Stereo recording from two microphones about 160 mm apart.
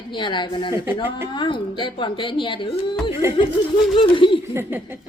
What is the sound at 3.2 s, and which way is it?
Speech, 20° right (ahead or behind).